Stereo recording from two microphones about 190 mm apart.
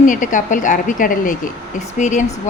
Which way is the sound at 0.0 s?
45° left (ahead or behind).